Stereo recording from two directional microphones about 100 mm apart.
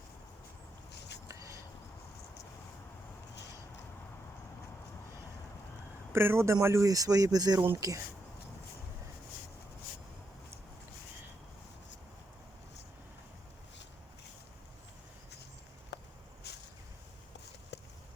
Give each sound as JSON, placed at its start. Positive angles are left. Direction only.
{"t": 1.3, "sound": "a sound", "side_deg": -30}
{"t": 6.1, "sound": "speech", "side_deg": -25}
{"t": 6.8, "sound": "speech", "side_deg": -35}